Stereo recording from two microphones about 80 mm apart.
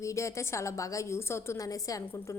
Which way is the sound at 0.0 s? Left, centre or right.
Left.